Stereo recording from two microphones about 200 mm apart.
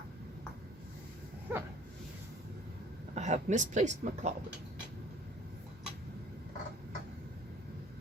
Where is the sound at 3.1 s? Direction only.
35° right (ahead or behind).